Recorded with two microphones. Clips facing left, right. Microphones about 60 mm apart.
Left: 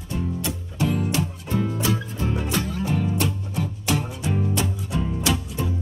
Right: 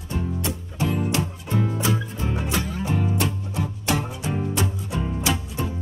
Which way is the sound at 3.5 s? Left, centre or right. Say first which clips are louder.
Even; right.